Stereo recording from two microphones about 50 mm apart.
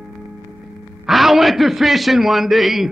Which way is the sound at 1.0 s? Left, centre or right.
Centre.